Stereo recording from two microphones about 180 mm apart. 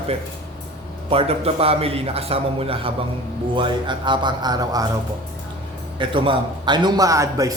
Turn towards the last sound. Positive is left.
turn(degrees=-20)  # may be behind; listen again after turning